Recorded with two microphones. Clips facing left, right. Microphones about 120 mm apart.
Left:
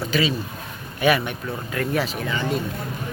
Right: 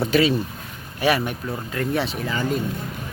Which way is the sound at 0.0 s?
55° right (ahead or behind).